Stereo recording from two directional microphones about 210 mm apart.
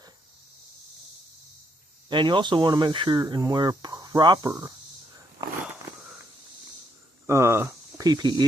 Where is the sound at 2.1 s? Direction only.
20° right (ahead or behind).